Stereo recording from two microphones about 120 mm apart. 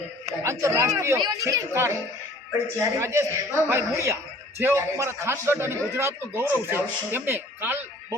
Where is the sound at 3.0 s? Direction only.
25° right (ahead or behind).